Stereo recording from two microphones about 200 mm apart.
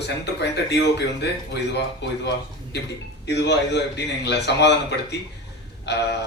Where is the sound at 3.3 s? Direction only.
60° left (ahead or behind).